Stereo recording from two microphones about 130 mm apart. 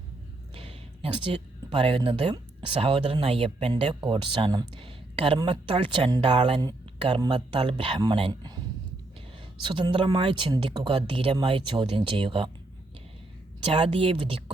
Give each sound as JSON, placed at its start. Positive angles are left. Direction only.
{"t": 0.5, "sound": "a sound", "side_deg": -45}
{"t": 1.8, "sound": "speech", "side_deg": -40}
{"t": 9.6, "sound": "speech", "side_deg": -40}
{"t": 13.6, "sound": "speech", "side_deg": -45}